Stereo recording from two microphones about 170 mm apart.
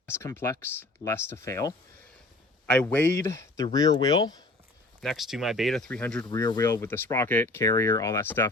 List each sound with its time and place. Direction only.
0.0 s speech: 15° left (ahead or behind)
2.8 s speech: 10° left (ahead or behind)
4.9 s speech: centre (ahead or behind)
6.2 s speech: 20° left (ahead or behind)